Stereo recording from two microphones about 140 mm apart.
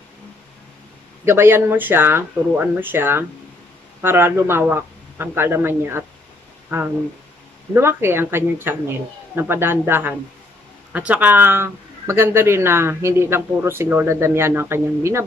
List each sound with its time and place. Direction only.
1.2 s speech: 15° right (ahead or behind)
7.7 s speech: 15° right (ahead or behind)